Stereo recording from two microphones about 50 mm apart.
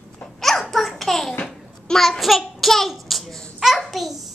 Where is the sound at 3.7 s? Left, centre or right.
Centre.